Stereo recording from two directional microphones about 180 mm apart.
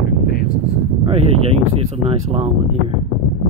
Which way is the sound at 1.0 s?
35° right (ahead or behind).